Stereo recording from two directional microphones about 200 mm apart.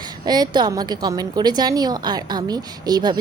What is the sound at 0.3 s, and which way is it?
A woman's voice, 20° right (ahead or behind).